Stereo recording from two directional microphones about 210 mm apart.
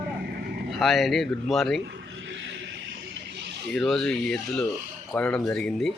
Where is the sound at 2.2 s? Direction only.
60° right (ahead or behind).